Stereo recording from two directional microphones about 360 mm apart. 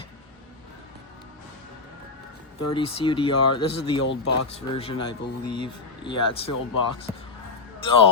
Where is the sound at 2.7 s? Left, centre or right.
Centre.